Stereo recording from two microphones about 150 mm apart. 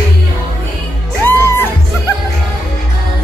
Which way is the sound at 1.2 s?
15° left (ahead or behind).